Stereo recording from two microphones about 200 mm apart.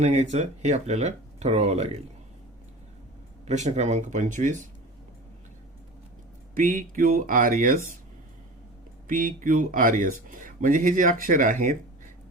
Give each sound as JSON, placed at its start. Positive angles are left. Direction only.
{"t": 0.0, "sound": "speech", "side_deg": -35}
{"t": 3.4, "sound": "speech", "side_deg": -35}
{"t": 6.5, "sound": "speech", "side_deg": -45}
{"t": 9.0, "sound": "speech", "side_deg": -45}